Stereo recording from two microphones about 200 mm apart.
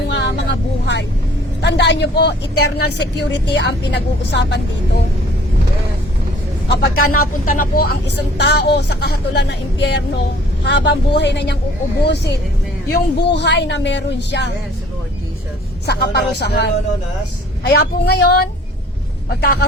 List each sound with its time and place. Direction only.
0.1 s vehicle: 60° left (ahead or behind)
1.6 s speech: 60° left (ahead or behind)
6.7 s speech: 45° left (ahead or behind)
15.9 s speech: 55° left (ahead or behind)